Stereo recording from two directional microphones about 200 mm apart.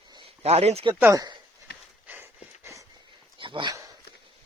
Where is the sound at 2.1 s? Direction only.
10° right (ahead or behind).